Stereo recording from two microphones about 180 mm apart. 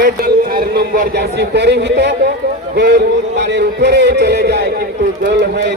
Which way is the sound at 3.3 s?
70° right (ahead or behind).